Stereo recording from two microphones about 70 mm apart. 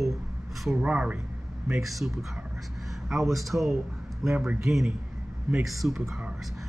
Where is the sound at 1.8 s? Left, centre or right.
Centre.